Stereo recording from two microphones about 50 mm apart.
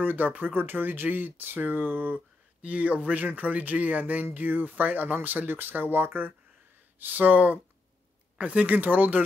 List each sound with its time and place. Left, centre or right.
0.0 s speech: right
2.6 s speech: right